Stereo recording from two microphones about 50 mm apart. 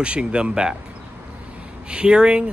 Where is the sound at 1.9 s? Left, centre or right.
Centre.